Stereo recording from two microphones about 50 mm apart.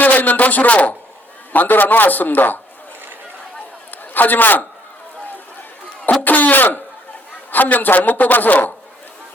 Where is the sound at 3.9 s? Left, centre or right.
Left.